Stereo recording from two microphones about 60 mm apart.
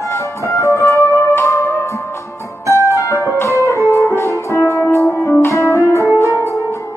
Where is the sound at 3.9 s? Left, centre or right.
Left.